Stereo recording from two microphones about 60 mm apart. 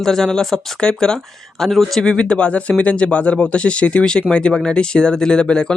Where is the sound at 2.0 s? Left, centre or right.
Centre.